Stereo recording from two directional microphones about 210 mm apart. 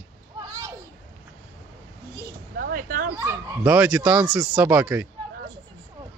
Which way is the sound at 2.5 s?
45° right (ahead or behind).